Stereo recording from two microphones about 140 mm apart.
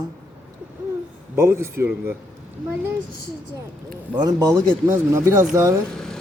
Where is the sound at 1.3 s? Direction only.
20° right (ahead or behind).